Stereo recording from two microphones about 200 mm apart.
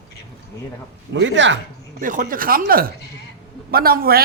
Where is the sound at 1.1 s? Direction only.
65° right (ahead or behind).